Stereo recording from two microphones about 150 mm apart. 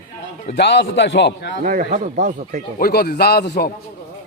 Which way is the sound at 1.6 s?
60° right (ahead or behind).